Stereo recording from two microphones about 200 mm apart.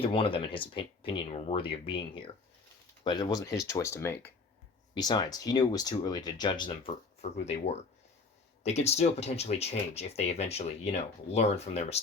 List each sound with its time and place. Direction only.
0.0 s speech: 25° left (ahead or behind)